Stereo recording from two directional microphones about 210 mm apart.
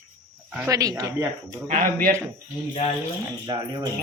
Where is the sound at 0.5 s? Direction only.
10° right (ahead or behind).